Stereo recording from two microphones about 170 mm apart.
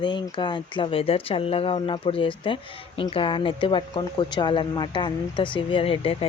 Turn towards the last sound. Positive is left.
turn(degrees=35)  # may be behind; listen again after turning